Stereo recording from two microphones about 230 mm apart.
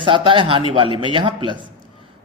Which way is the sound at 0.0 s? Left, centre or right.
Right.